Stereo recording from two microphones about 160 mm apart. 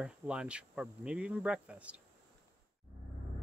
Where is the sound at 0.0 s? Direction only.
5° right (ahead or behind).